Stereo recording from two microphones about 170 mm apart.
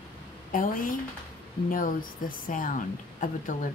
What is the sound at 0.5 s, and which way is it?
A woman's voice, 55° left (ahead or behind).